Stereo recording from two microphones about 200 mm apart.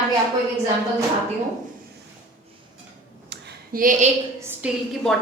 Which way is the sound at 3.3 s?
55° right (ahead or behind).